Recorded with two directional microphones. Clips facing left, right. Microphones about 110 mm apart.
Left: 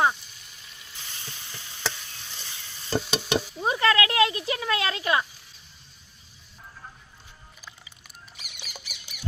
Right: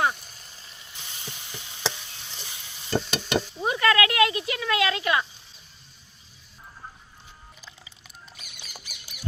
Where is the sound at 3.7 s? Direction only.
30° left (ahead or behind).